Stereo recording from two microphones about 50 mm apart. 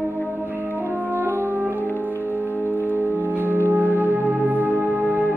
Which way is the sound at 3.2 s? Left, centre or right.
Right.